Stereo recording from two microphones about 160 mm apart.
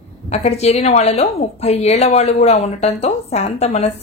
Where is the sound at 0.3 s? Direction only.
40° left (ahead or behind).